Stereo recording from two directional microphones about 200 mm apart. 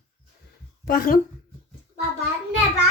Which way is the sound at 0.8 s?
45° left (ahead or behind).